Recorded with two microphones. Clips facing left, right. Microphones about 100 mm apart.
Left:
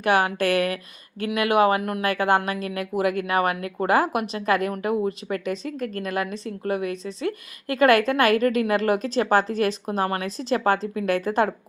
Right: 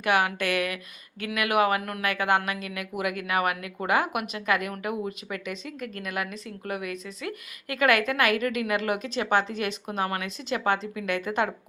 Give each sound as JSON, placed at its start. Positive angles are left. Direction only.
{"t": 0.0, "sound": "speech", "side_deg": 35}